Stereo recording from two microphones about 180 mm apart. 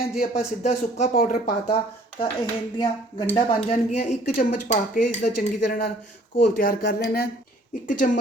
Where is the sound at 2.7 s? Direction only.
25° left (ahead or behind).